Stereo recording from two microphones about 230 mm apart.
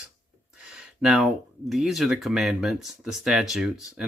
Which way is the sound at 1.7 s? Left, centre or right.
Centre.